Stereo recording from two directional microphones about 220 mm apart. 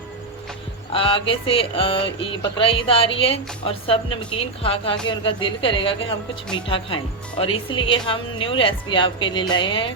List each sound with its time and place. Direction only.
0.9 s a woman's voice: 25° left (ahead or behind)